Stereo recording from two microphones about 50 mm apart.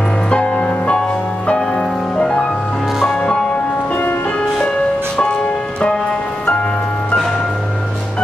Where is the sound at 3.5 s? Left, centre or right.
Left.